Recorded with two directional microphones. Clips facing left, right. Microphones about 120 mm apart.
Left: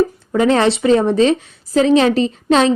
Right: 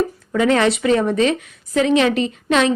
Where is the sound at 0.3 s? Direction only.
30° left (ahead or behind).